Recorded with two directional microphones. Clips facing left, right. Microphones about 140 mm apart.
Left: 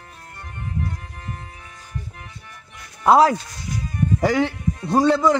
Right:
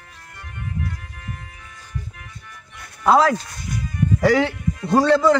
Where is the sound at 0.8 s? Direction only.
35° left (ahead or behind).